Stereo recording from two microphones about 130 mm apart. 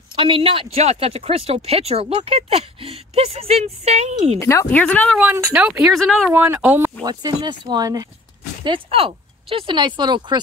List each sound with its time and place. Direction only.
0.1 s speech: 45° right (ahead or behind); by 4.4 s 60° right (ahead or behind)
4.4 s speech: 20° left (ahead or behind)
5.3 s speech: 15° right (ahead or behind); by 6.3 s centre (ahead or behind)
6.3 s speech: 15° right (ahead or behind)
7.0 s speech: 30° right (ahead or behind)
8.6 s speech: 45° right (ahead or behind)